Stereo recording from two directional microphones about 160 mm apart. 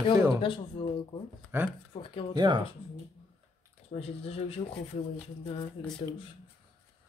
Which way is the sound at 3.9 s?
40° left (ahead or behind).